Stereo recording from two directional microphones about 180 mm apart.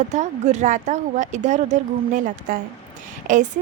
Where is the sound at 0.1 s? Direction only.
40° right (ahead or behind).